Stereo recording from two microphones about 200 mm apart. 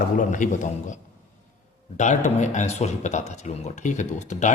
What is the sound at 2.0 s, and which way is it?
Speech, 35° left (ahead or behind).